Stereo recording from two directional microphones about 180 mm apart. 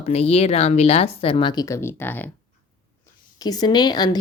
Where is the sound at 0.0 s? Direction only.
35° left (ahead or behind); by 2.3 s 10° left (ahead or behind).